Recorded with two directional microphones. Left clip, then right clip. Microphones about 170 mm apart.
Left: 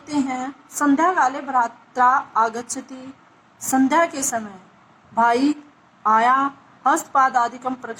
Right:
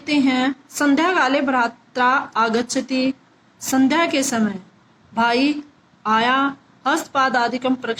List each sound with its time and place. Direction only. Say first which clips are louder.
0.0 s a woman's voice: right 6 dB; 20° right (ahead or behind)